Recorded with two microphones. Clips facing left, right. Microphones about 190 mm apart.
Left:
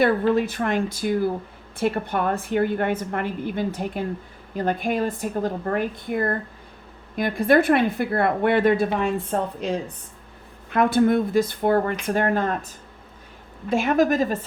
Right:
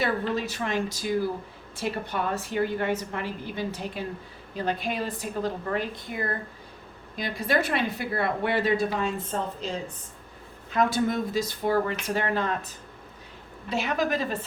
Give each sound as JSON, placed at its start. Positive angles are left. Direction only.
{"t": 0.0, "sound": "a woman's voice", "side_deg": 55}